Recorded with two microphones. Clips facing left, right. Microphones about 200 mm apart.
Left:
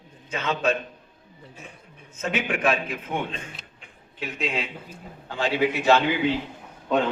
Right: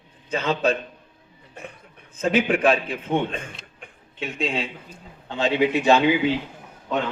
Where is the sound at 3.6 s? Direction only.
Centre (ahead or behind).